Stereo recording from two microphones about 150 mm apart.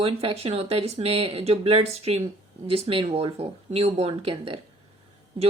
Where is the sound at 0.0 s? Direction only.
40° right (ahead or behind).